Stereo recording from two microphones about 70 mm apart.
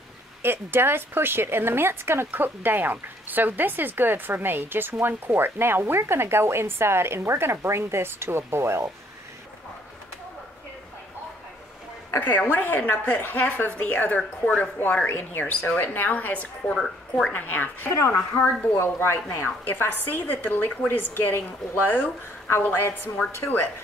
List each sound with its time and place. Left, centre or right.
0.4 s a woman's voice: right
12.1 s a woman's voice: left
16.7 s speech: centre
17.3 s a woman's voice: left
17.9 s a woman's voice: left
23.2 s speech: centre